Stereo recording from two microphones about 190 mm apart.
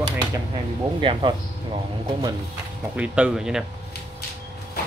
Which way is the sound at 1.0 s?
25° right (ahead or behind).